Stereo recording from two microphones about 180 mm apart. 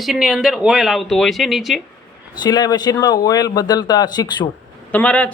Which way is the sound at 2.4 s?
20° left (ahead or behind).